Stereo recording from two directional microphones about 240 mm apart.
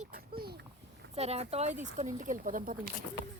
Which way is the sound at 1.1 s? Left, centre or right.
Right.